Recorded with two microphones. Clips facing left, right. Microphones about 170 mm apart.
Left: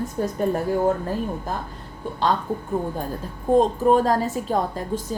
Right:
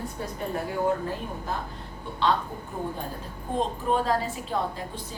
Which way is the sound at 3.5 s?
45° left (ahead or behind).